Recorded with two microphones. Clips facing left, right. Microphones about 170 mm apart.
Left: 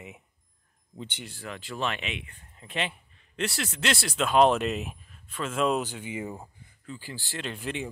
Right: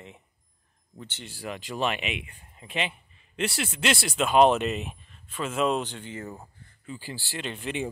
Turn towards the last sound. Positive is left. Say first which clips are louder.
# right 1 dB
turn(degrees=0)  # may be behind; listen again after turning